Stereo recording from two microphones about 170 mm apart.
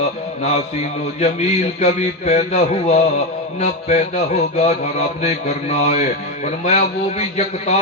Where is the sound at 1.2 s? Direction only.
40° left (ahead or behind).